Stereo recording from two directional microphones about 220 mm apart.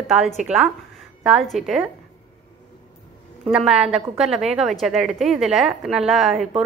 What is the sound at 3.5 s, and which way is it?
A woman's voice, centre (ahead or behind).